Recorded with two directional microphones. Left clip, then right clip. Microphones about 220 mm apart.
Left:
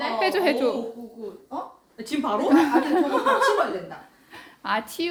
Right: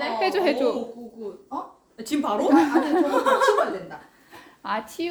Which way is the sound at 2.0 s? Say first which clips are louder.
Right 1 dB; 45° right (ahead or behind).